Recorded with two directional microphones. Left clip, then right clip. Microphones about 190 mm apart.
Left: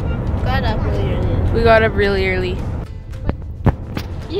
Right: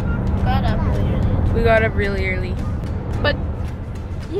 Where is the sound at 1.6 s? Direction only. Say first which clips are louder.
Left 4 dB; 20° left (ahead or behind).